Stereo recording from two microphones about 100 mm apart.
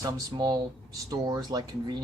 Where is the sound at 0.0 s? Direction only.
40° right (ahead or behind).